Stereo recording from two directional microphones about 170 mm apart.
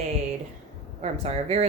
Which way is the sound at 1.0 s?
40° right (ahead or behind).